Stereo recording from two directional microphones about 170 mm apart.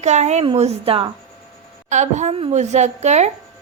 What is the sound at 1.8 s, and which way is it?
A woman's voice, 45° right (ahead or behind).